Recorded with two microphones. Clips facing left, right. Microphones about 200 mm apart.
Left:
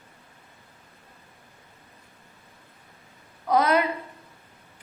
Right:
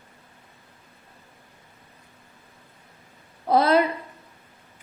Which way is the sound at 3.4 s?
30° right (ahead or behind).